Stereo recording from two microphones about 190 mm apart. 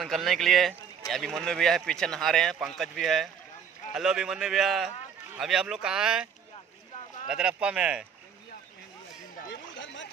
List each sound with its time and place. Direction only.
0.0 s speech: centre (ahead or behind)
7.2 s speech: 5° right (ahead or behind)
9.5 s a sound: 75° left (ahead or behind)